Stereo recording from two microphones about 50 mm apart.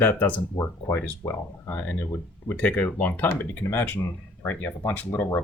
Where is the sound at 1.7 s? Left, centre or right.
Left.